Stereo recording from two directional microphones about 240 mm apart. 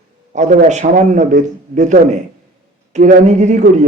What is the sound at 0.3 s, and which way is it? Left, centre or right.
A man's voice, right.